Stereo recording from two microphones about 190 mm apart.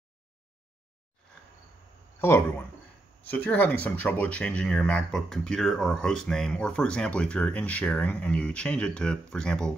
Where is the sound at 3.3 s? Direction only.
10° left (ahead or behind).